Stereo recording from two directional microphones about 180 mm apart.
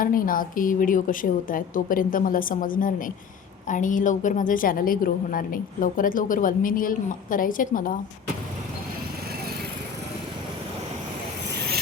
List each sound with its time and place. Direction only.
0.0 s a woman's voice: 50° left (ahead or behind)